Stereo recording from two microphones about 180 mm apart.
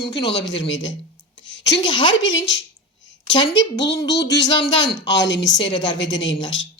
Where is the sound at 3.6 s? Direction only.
90° left.